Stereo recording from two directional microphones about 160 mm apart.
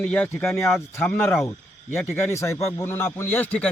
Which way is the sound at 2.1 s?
15° left (ahead or behind).